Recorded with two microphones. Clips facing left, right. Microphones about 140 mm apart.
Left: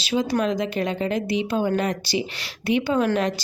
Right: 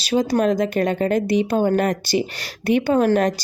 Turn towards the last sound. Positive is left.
turn(degrees=-45)  # may be behind; listen again after turning